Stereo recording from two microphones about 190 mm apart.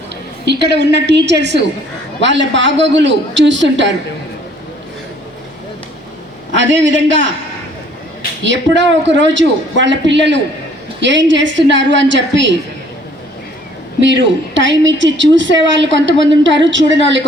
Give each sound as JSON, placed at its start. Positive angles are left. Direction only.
{"t": 0.4, "sound": "a woman's voice", "side_deg": -65}
{"t": 6.6, "sound": "a woman's voice", "side_deg": -75}
{"t": 8.4, "sound": "a woman's voice", "side_deg": -70}
{"t": 14.0, "sound": "a woman's voice", "side_deg": -75}